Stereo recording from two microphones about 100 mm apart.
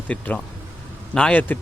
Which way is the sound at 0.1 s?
15° left (ahead or behind).